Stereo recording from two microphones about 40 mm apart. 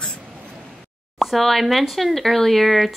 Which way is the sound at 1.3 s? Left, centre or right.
Centre.